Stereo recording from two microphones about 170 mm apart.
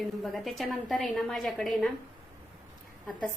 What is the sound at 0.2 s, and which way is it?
A woman's voice, centre (ahead or behind).